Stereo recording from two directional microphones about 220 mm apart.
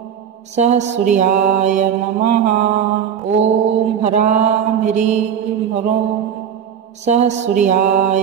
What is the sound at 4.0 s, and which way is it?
Mantra, 30° right (ahead or behind).